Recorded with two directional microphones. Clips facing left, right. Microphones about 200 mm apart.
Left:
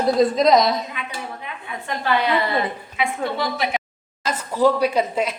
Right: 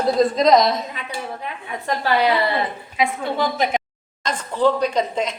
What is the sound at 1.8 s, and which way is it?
A woman's voice, 40° right (ahead or behind).